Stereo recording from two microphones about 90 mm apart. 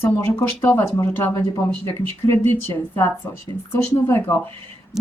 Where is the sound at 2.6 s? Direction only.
25° left (ahead or behind).